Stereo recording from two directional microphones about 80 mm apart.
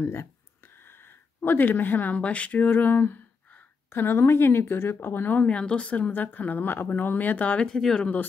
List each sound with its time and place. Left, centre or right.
0.0 s speech: left
7.6 s speech: centre